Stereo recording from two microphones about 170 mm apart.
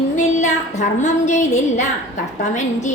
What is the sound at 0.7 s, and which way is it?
A woman's voice, 45° left (ahead or behind).